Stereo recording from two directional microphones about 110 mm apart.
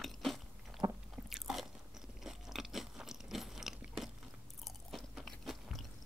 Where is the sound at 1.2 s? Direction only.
Centre (ahead or behind).